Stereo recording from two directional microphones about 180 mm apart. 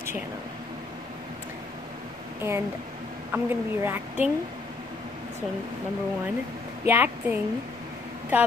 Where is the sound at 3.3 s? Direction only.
10° right (ahead or behind).